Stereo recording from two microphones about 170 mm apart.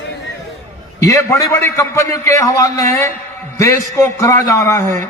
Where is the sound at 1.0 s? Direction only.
20° left (ahead or behind).